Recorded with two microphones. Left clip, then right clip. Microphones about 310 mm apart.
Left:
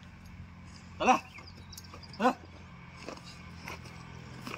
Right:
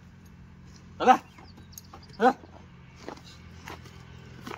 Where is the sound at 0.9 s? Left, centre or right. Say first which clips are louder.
Right 6 dB; centre.